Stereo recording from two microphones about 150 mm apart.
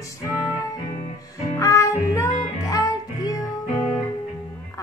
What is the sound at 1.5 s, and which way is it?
Music, 20° left (ahead or behind).